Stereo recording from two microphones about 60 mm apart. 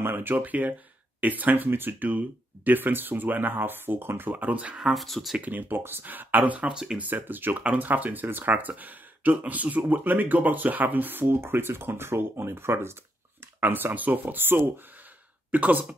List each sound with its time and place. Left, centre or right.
0.0 s speech: right
4.7 s speech: centre
5.0 s speech: centre
5.4 s speech: right
6.7 s speech: centre
7.0 s speech: right